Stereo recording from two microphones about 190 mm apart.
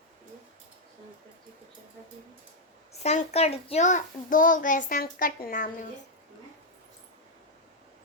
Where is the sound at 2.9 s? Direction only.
35° left (ahead or behind).